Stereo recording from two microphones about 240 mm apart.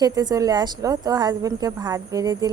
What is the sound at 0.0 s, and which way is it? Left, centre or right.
A woman's voice, centre.